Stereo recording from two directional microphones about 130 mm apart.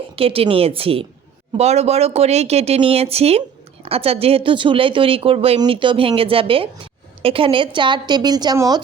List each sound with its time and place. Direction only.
0.2 s a woman's voice: 45° right (ahead or behind); by 8.8 s 30° right (ahead or behind)